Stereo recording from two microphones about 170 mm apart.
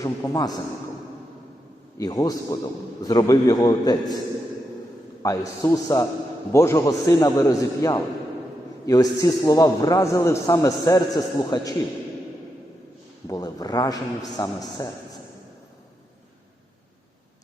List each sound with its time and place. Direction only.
0.0 s a man's voice: 20° left (ahead or behind)
2.0 s a man's voice: 20° left (ahead or behind)
5.2 s a man's voice: 20° left (ahead or behind)
13.2 s a man's voice: 20° left (ahead or behind)